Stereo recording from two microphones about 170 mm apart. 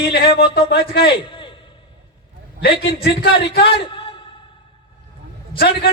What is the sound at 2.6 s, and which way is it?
A man's voice, 85° left.